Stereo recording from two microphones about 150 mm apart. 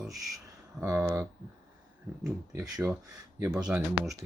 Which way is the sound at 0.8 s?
15° right (ahead or behind).